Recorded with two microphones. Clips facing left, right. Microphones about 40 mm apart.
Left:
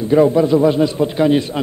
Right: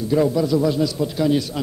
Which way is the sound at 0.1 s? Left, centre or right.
Left.